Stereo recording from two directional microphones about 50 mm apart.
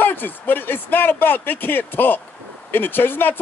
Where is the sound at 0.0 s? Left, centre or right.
Left.